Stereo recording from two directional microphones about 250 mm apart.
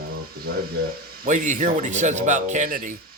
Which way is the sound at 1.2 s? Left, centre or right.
Right.